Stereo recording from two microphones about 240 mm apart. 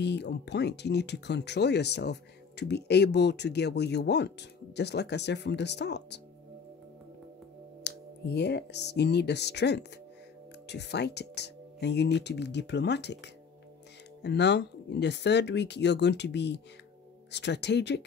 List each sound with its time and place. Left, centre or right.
0.0 s speech: left
7.8 s speech: left